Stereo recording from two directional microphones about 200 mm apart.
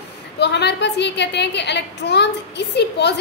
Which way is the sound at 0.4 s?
60° left (ahead or behind).